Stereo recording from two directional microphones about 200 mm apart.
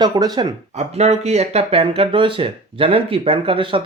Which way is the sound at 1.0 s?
35° right (ahead or behind).